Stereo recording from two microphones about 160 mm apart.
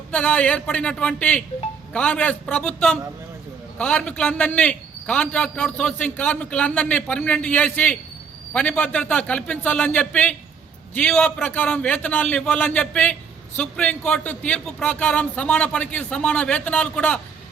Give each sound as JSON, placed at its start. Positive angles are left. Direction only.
{"t": 0.1, "sound": "a man's voice", "side_deg": 10}